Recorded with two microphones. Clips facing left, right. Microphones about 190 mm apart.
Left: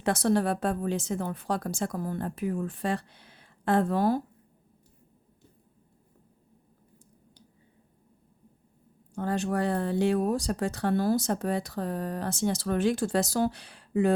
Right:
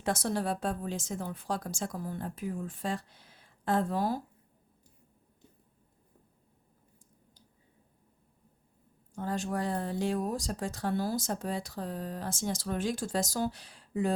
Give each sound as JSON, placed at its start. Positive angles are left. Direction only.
{"t": 0.0, "sound": "speech", "side_deg": 65}
{"t": 9.1, "sound": "speech", "side_deg": 65}